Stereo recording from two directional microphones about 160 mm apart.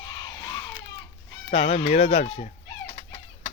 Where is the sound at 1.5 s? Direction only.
45° left (ahead or behind).